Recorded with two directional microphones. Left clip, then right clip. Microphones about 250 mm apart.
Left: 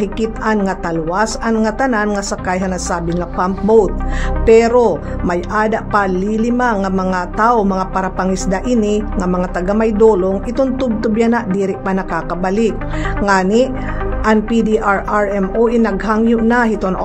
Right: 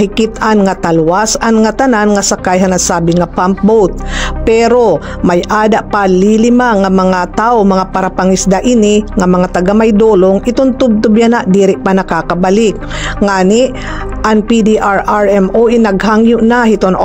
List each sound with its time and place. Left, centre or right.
0.0 s speech: right